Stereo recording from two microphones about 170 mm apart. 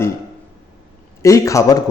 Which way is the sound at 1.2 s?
20° left (ahead or behind).